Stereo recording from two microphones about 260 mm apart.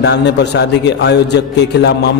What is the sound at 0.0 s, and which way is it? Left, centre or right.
Music, left.